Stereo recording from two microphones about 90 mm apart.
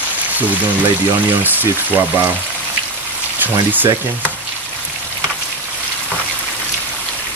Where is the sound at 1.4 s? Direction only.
20° right (ahead or behind).